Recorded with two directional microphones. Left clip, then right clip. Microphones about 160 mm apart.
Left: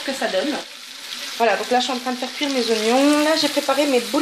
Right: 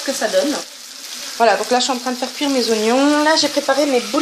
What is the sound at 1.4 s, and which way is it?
Frying, 15° right (ahead or behind).